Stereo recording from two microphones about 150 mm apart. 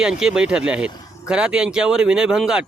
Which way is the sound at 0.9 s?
25° left (ahead or behind).